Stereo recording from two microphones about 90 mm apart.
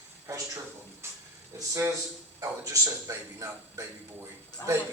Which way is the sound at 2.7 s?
35° right (ahead or behind).